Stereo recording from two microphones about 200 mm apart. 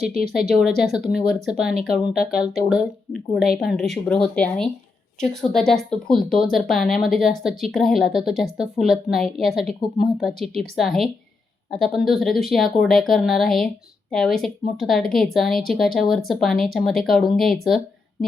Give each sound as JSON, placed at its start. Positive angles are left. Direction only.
{"t": 0.2, "sound": "a woman's voice", "side_deg": 0}